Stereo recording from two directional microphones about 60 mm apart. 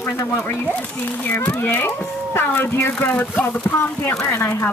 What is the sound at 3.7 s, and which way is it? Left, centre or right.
Speech, left.